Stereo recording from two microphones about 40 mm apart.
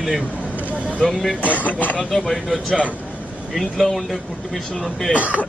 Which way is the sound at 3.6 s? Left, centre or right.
Centre.